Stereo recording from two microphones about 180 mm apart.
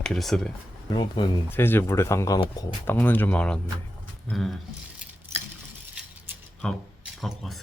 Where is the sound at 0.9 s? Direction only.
25° left (ahead or behind).